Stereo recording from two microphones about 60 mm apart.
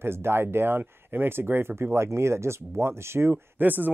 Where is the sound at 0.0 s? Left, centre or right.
Right.